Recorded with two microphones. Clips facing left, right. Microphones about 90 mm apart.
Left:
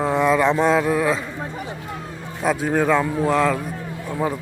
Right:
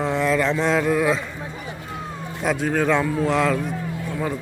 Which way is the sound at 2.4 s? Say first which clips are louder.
Left 2 dB; 5° left (ahead or behind).